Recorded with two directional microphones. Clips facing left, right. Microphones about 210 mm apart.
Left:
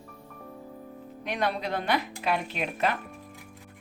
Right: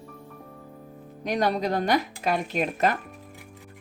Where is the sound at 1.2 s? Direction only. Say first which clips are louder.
Right 5 dB; 40° right (ahead or behind).